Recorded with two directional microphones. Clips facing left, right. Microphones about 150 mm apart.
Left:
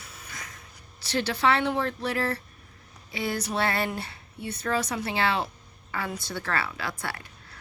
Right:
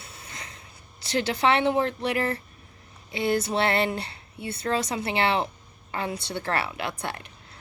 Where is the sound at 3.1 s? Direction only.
25° right (ahead or behind).